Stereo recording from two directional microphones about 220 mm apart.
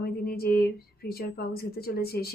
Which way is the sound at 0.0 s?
45° left (ahead or behind).